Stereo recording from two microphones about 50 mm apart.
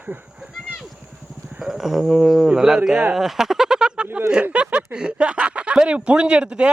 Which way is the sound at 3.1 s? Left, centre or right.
Centre.